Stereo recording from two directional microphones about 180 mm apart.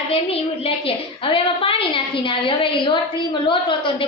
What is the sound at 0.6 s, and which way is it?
A woman's voice, 30° left (ahead or behind).